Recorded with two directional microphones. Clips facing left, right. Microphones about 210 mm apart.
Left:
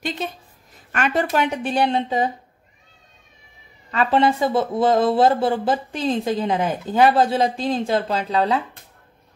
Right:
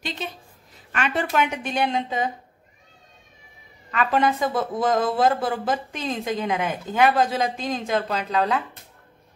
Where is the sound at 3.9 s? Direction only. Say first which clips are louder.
Left 3 dB; 30° left (ahead or behind).